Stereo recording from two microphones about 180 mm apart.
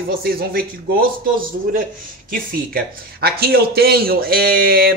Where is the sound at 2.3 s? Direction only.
55° right (ahead or behind).